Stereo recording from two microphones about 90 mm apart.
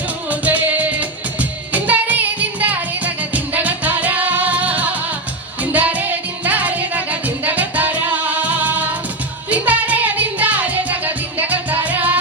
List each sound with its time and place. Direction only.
0.3 s music: 20° right (ahead or behind)